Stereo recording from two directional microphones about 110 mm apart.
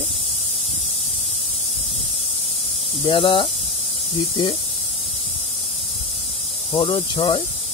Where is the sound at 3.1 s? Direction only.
55° left (ahead or behind).